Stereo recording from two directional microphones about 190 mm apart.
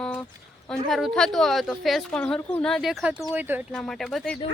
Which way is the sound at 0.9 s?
Centre (ahead or behind).